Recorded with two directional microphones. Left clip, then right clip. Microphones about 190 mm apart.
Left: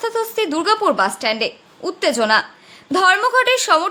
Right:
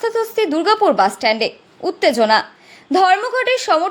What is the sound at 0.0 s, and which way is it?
A woman's voice, 10° right (ahead or behind).